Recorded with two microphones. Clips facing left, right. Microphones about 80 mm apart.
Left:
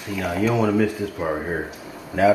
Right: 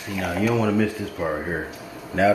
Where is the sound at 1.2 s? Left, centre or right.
Centre.